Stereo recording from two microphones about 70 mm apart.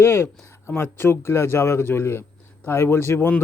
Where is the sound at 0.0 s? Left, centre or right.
Left.